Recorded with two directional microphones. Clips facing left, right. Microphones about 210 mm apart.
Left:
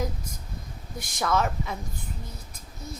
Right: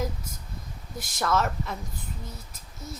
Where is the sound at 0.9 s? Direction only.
5° right (ahead or behind).